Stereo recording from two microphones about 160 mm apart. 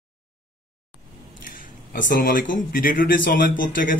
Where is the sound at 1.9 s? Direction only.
60° left (ahead or behind).